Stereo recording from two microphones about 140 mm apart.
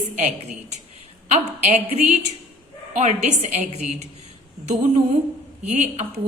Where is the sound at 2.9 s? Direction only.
55° right (ahead or behind).